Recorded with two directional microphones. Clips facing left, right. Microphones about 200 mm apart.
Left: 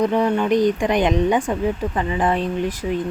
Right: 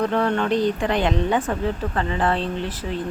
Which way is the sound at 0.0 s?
15° left (ahead or behind).